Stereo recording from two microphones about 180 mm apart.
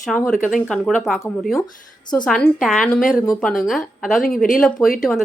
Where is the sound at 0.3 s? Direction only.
Centre (ahead or behind).